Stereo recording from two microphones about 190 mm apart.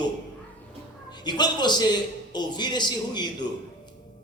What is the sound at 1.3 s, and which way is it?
A man's voice, 20° left (ahead or behind).